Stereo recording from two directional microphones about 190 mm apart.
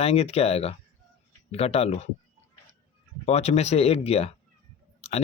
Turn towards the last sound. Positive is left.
turn(degrees=35)  # may be behind; listen again after turning